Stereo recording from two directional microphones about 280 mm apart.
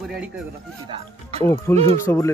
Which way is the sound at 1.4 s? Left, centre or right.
Centre.